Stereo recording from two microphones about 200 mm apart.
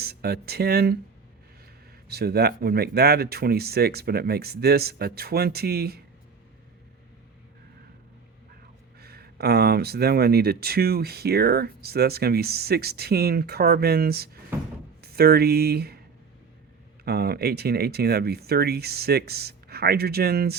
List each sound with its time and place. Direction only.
0.0 s speech: 50° right (ahead or behind)
2.0 s speech: 50° right (ahead or behind)
9.0 s speech: 50° right (ahead or behind)
14.5 s a sound: 10° right (ahead or behind)
15.0 s speech: 50° right (ahead or behind)
17.1 s speech: 50° right (ahead or behind)